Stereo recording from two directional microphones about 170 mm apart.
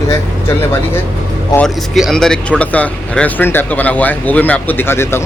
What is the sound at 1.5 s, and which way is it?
Speech, centre (ahead or behind).